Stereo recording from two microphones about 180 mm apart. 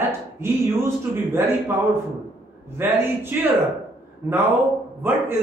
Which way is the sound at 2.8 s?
10° right (ahead or behind).